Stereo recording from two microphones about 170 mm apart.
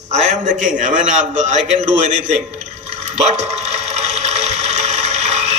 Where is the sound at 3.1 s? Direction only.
40° right (ahead or behind).